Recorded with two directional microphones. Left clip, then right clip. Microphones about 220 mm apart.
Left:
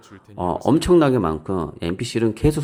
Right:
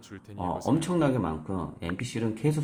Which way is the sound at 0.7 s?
45° left (ahead or behind).